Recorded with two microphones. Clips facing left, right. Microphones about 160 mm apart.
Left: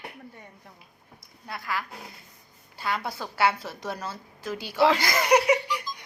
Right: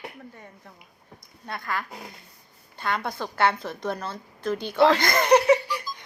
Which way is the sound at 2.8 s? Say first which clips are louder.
Right 2 dB; 5° left (ahead or behind).